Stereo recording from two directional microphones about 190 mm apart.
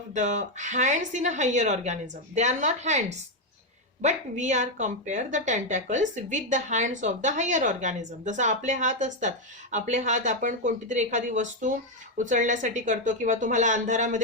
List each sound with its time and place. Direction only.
0.1 s a woman's voice: 40° right (ahead or behind)